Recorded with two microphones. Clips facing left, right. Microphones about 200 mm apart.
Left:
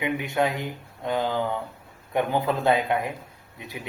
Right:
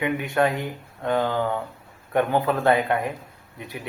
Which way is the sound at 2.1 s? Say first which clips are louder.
Right 3 dB; 15° left (ahead or behind).